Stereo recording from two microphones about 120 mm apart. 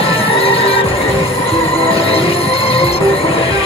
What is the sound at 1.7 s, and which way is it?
Music, 50° left (ahead or behind).